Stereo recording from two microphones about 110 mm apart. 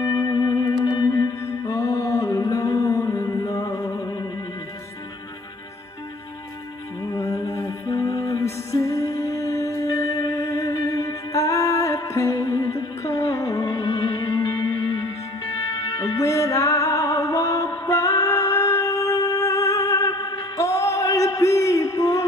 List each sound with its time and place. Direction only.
0.0 s music: 30° left (ahead or behind)
7.1 s music: 30° left (ahead or behind)